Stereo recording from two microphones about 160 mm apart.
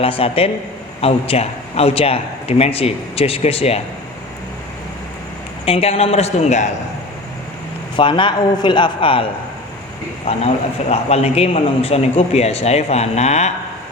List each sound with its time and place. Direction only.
0.0 s a man's voice: 35° left (ahead or behind)
5.6 s a man's voice: 40° left (ahead or behind)
7.9 s a man's voice: 30° left (ahead or behind)
10.2 s a man's voice: 40° left (ahead or behind)